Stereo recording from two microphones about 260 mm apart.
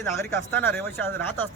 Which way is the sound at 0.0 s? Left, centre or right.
Centre.